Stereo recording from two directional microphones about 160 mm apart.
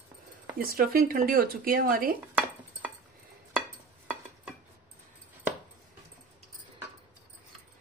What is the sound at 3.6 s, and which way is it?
Stir, 5° right (ahead or behind).